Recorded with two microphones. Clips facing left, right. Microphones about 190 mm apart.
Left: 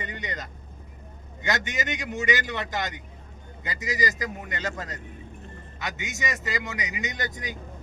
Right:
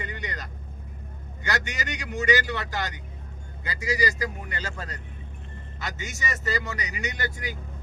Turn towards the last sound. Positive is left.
turn(degrees=15)  # may be behind; listen again after turning